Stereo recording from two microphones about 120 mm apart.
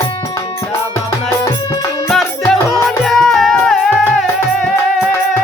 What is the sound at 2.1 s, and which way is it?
Music, centre (ahead or behind).